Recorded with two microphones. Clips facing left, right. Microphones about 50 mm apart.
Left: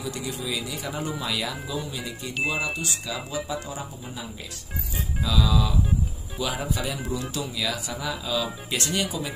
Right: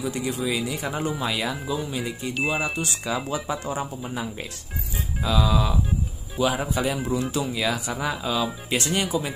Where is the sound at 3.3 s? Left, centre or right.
Right.